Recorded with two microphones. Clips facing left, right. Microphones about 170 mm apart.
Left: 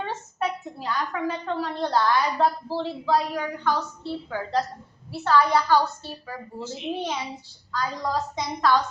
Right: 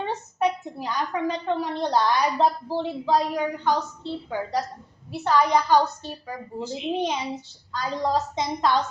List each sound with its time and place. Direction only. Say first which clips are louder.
0.0 s a woman's voice: right 4 dB; 20° right (ahead or behind)